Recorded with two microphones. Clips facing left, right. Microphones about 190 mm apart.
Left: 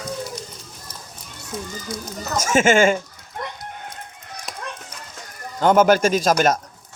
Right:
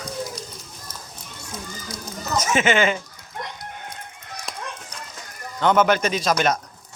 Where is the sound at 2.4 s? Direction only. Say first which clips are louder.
Left 4 dB; 45° left (ahead or behind).